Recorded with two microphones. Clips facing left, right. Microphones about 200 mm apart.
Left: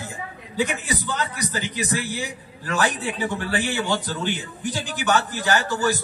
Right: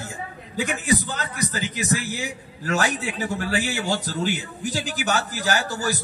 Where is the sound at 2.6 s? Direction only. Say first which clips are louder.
Even; 40° right (ahead or behind).